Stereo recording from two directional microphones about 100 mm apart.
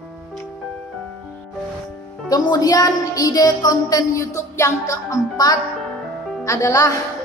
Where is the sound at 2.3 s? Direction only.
35° left (ahead or behind).